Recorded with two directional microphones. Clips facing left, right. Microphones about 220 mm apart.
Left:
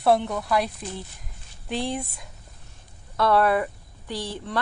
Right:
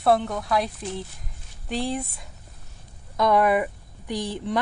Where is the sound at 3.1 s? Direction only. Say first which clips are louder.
Right 1 dB; 15° right (ahead or behind).